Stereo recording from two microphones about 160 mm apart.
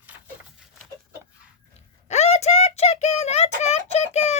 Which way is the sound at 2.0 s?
45° left (ahead or behind).